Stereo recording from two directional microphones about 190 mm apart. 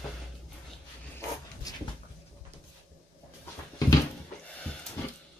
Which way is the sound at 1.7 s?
20° left (ahead or behind).